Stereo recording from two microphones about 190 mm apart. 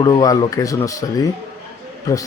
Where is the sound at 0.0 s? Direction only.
20° left (ahead or behind).